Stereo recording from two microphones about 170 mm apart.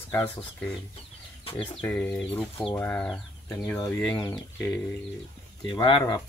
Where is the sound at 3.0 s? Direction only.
Centre (ahead or behind).